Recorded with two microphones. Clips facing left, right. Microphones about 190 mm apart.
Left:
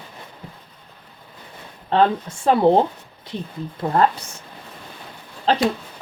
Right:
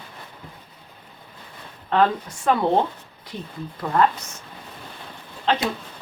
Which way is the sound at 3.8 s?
35° left (ahead or behind).